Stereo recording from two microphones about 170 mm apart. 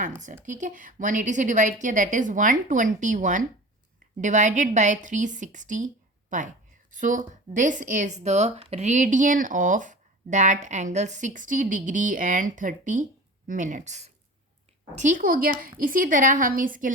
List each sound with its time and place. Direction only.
0.4 s speech: 45° right (ahead or behind)